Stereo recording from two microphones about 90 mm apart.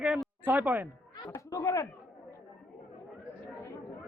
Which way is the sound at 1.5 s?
40° left (ahead or behind).